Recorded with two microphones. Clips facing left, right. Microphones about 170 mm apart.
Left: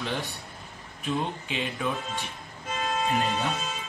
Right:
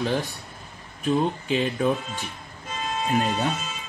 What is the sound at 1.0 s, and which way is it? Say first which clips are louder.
Speech: right 7 dB; 40° right (ahead or behind).